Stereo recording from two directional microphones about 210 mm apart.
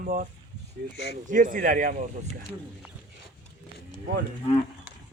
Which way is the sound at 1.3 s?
40° right (ahead or behind).